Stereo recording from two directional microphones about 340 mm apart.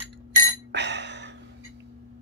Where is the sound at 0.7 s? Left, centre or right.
Right.